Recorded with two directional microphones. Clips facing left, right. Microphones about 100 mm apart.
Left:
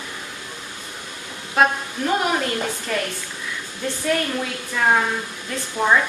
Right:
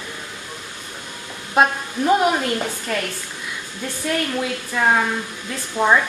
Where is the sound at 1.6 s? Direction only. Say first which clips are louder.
Right 1 dB; 20° right (ahead or behind).